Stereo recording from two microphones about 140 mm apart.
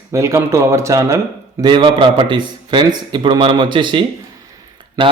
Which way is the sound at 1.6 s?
35° right (ahead or behind).